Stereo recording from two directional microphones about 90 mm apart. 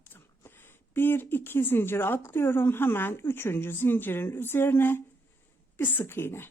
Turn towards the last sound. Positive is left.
turn(degrees=25)  # may be behind; listen again after turning